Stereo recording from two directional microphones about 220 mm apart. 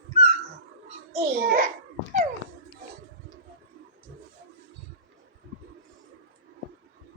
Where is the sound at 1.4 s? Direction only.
40° right (ahead or behind).